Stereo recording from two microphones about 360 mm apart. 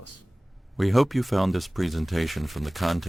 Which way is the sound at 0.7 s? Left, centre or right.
Centre.